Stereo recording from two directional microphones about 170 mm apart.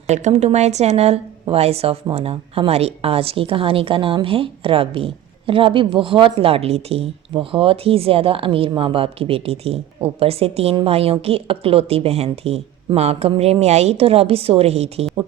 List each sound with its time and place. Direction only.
0.1 s a woman's voice: 45° right (ahead or behind)